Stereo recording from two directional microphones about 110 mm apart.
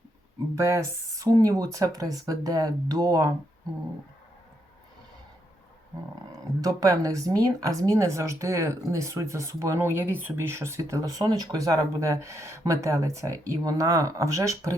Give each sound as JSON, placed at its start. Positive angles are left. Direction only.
{"t": 0.5, "sound": "speech", "side_deg": -30}
{"t": 6.6, "sound": "speech", "side_deg": -30}